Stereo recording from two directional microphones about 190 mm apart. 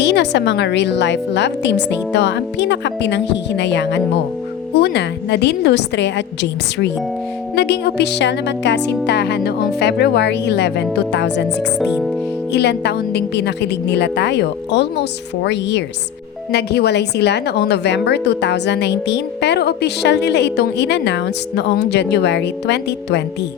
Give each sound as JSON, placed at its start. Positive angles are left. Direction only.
{"t": 0.0, "sound": "a woman's voice", "side_deg": 65}
{"t": 11.8, "sound": "speech", "side_deg": 0}
{"t": 12.5, "sound": "a woman's voice", "side_deg": 60}